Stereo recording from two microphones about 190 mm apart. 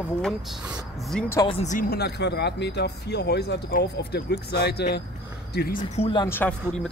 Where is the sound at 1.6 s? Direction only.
45° left (ahead or behind).